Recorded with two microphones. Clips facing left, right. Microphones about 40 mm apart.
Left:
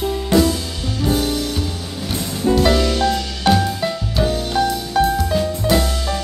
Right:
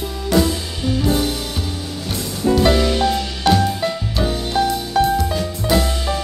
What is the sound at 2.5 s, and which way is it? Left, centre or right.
Music, centre.